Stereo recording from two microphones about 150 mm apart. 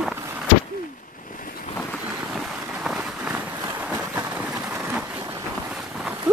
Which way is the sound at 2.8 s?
10° right (ahead or behind).